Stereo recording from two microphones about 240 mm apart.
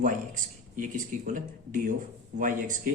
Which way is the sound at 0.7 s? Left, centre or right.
Right.